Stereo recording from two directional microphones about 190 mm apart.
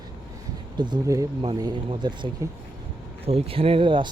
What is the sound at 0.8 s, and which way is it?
Speech, 20° right (ahead or behind).